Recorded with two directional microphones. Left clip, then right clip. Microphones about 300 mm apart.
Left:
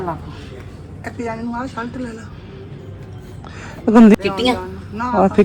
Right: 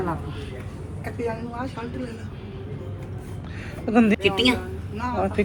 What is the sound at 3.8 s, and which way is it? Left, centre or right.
Speech, left.